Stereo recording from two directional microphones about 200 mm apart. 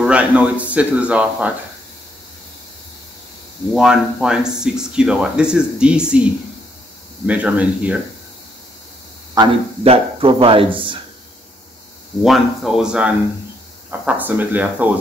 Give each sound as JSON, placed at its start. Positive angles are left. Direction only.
{"t": 0.0, "sound": "speech", "side_deg": -5}
{"t": 3.7, "sound": "speech", "side_deg": -5}
{"t": 7.2, "sound": "speech", "side_deg": -5}
{"t": 9.3, "sound": "a man's voice", "side_deg": -25}
{"t": 12.2, "sound": "speech", "side_deg": 0}